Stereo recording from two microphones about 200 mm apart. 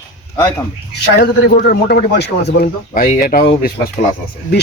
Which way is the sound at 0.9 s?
55° left (ahead or behind).